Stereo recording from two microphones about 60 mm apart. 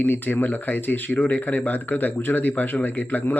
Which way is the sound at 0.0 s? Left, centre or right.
Left.